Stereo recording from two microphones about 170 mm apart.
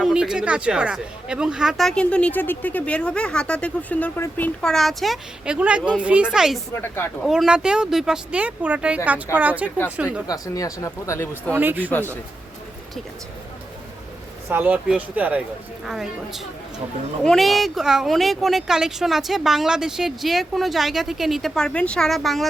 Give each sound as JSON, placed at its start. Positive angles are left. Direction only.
{"t": 0.0, "sound": "speech", "side_deg": -5}
{"t": 6.8, "sound": "speech", "side_deg": 15}
{"t": 7.2, "sound": "speech", "side_deg": 0}
{"t": 10.2, "sound": "speech", "side_deg": 20}
{"t": 11.5, "sound": "speech", "side_deg": -10}
{"t": 14.5, "sound": "speech", "side_deg": -10}